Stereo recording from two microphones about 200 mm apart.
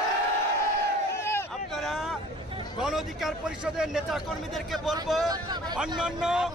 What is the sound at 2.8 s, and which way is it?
Speech, centre (ahead or behind).